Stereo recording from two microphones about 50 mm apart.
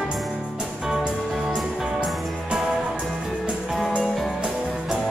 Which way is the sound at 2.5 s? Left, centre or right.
Centre.